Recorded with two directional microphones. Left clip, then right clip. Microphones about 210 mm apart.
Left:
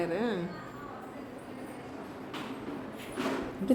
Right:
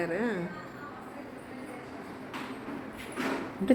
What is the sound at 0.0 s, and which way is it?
Speech, centre (ahead or behind).